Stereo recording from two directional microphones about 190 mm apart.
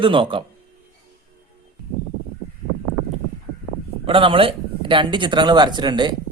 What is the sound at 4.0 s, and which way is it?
Speech, 25° right (ahead or behind).